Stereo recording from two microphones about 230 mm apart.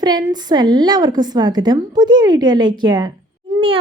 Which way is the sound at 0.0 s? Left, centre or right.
Centre.